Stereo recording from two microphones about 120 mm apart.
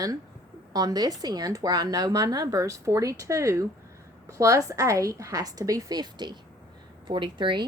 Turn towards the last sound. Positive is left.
turn(degrees=-40)  # may be behind; listen again after turning